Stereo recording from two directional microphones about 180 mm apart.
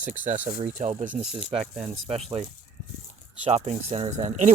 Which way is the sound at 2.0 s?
35° right (ahead or behind).